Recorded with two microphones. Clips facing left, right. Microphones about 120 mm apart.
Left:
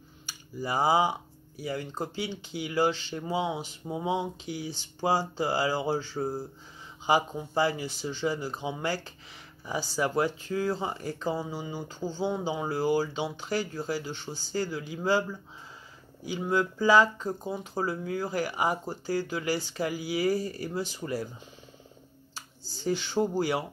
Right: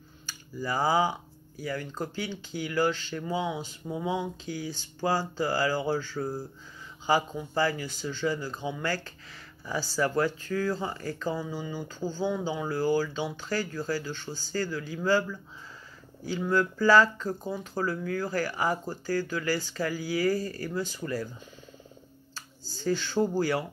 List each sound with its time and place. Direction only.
0.3 s speech: 20° left (ahead or behind)
22.3 s speech: 20° left (ahead or behind)